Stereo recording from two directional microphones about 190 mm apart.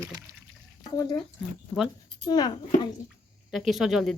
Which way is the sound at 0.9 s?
20° left (ahead or behind).